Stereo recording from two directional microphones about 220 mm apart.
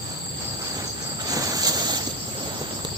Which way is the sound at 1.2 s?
15° right (ahead or behind).